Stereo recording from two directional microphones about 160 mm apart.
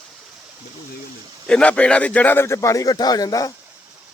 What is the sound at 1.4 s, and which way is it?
A man's voice, 5° left (ahead or behind).